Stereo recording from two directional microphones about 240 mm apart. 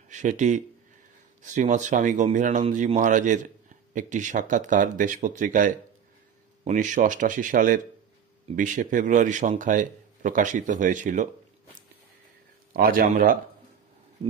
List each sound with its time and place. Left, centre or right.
0.1 s speech: right
12.7 s speech: right